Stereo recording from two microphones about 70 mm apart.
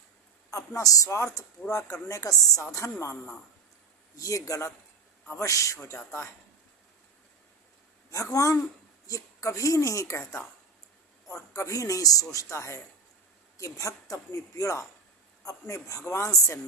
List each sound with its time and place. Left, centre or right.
0.5 s speech: left
4.2 s speech: left
8.1 s speech: left